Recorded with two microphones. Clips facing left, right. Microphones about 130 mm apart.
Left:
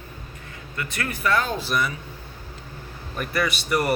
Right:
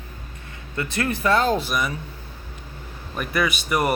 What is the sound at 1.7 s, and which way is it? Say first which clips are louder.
Speech: even; 15° right (ahead or behind).